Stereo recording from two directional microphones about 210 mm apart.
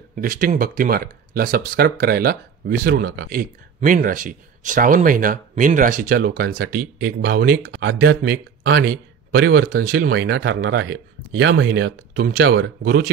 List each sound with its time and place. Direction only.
0.1 s speech: 40° right (ahead or behind)